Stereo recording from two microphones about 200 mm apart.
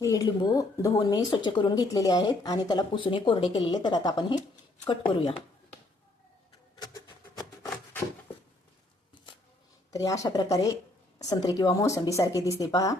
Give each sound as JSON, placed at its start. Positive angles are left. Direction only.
{"t": 0.0, "sound": "speech", "side_deg": 15}
{"t": 6.7, "sound": "a sound", "side_deg": 20}
{"t": 9.9, "sound": "speech", "side_deg": 15}